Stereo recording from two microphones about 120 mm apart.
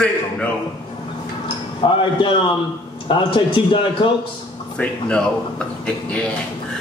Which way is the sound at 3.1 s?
45° left (ahead or behind).